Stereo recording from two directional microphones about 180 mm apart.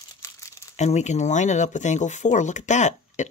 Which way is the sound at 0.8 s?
40° left (ahead or behind).